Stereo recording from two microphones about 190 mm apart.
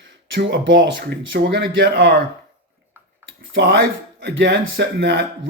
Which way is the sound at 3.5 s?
60° right (ahead or behind).